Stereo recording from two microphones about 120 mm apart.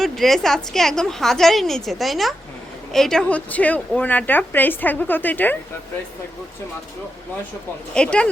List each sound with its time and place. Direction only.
0.0 s a woman's voice: centre (ahead or behind)
7.9 s a woman's voice: 10° left (ahead or behind)